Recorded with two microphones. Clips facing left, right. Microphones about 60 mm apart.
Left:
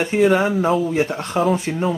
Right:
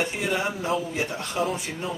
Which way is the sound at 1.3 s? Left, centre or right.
Left.